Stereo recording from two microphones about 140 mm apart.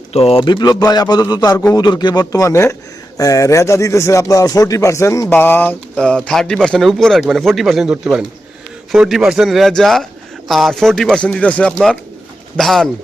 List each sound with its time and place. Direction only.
0.1 s speech: 45° left (ahead or behind); by 12.9 s centre (ahead or behind)